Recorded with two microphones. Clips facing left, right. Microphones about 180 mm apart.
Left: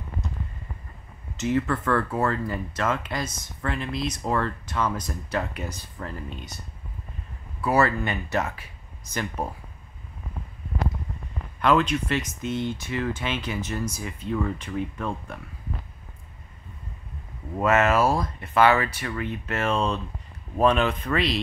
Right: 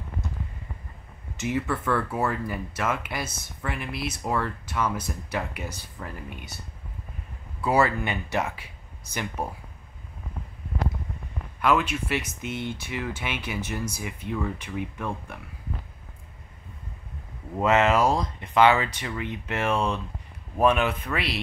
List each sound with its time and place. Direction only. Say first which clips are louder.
1.3 s speech: left 3 dB; 10° right (ahead or behind)
7.6 s speech: left 1 dB; 15° right (ahead or behind)
11.6 s speech: left 2 dB; 10° right (ahead or behind)
17.6 s speech: even; 15° right (ahead or behind)